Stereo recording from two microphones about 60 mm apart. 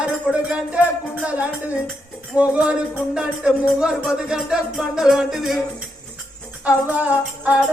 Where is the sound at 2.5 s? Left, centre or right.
Centre.